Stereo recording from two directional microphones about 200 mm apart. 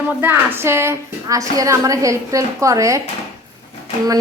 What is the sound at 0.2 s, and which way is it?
A woman's voice, 10° right (ahead or behind).